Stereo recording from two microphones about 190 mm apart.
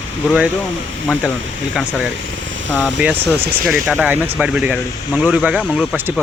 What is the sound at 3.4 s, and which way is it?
Speech, 55° right (ahead or behind).